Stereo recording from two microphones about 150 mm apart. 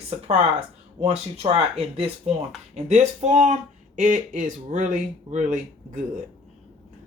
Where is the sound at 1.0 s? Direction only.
45° right (ahead or behind).